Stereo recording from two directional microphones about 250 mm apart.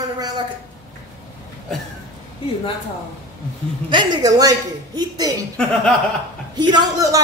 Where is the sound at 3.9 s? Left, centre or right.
Centre.